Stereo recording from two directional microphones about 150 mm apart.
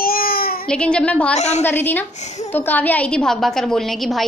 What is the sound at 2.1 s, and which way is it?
Speech, 50° left (ahead or behind).